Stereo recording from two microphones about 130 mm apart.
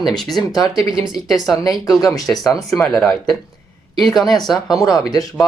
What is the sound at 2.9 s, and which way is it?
Speech, centre (ahead or behind).